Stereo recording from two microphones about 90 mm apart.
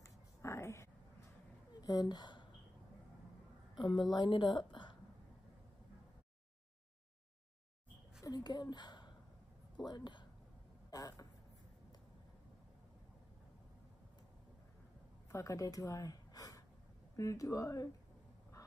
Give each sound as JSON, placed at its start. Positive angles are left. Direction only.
{"t": 0.0, "sound": "a sound", "side_deg": 30}
{"t": 1.8, "sound": "a woman's voice", "side_deg": 45}
{"t": 3.7, "sound": "a woman's voice", "side_deg": 55}
{"t": 8.2, "sound": "speech", "side_deg": 45}
{"t": 10.9, "sound": "a sound", "side_deg": 40}
{"t": 15.3, "sound": "speech", "side_deg": 35}